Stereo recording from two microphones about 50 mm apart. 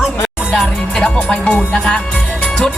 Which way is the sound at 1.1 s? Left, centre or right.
Centre.